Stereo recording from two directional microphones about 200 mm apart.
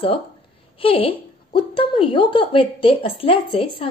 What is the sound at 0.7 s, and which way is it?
A woman's voice, 25° left (ahead or behind).